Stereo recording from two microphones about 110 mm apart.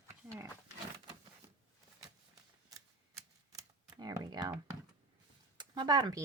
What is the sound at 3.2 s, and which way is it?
Typewriter, 30° right (ahead or behind).